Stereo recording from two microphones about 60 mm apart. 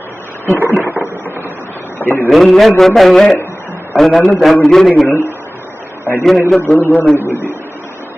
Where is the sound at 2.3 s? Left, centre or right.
Centre.